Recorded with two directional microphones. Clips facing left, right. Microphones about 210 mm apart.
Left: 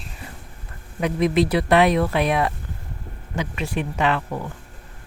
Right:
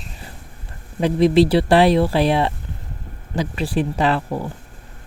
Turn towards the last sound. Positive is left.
turn(degrees=-35)  # may be behind; listen again after turning